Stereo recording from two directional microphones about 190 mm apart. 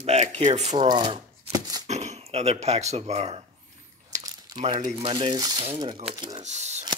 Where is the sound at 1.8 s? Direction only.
35° right (ahead or behind).